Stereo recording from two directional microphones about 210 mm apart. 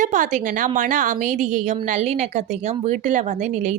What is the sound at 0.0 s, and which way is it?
A woman's voice, 35° right (ahead or behind).